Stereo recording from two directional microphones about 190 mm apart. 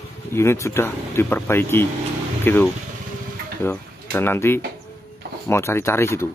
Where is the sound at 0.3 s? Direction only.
15° left (ahead or behind).